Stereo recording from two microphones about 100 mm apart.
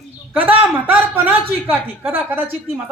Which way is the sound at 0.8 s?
15° right (ahead or behind).